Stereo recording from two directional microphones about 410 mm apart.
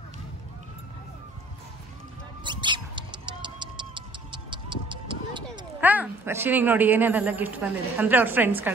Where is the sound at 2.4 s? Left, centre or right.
Centre.